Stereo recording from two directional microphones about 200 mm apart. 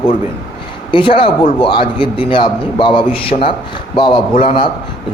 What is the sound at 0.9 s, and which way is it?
A man's voice, 25° left (ahead or behind).